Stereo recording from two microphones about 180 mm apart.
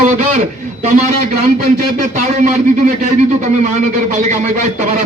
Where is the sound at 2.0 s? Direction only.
45° right (ahead or behind).